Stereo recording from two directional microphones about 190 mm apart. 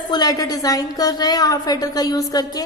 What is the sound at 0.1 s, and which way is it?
A woman's voice, 20° left (ahead or behind).